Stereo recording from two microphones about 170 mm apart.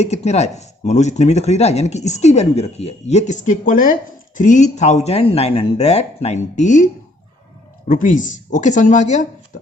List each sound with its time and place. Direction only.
0.0 s speech: 40° left (ahead or behind)
7.9 s speech: 50° left (ahead or behind)